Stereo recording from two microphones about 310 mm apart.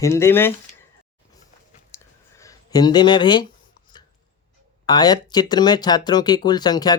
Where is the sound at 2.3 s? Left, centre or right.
Centre.